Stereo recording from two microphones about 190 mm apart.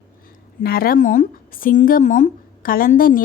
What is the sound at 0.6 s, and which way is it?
A woman's voice, 50° left (ahead or behind).